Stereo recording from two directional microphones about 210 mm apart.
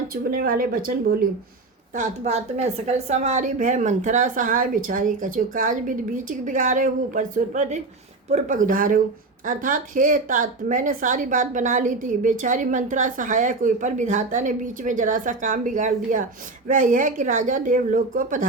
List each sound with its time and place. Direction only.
0.1 s speech: 45° right (ahead or behind)
2.0 s a woman's voice: 30° right (ahead or behind)